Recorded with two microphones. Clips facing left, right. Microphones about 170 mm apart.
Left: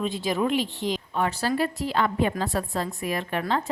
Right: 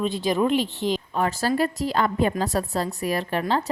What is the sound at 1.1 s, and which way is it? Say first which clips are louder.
A woman's voice: right 1 dB; 40° right (ahead or behind).